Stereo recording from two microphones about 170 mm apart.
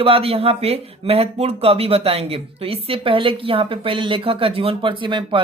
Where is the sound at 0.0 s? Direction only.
35° right (ahead or behind).